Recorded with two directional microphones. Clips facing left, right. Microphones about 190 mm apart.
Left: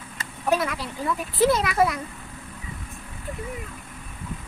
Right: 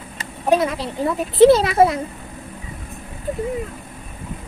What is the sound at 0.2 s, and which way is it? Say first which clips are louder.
Speech: right 6 dB; 25° right (ahead or behind).